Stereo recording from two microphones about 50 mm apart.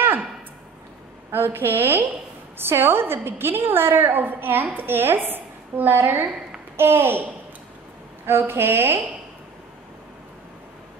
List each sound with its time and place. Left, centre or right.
1.3 s a woman's voice: right
8.3 s a woman's voice: right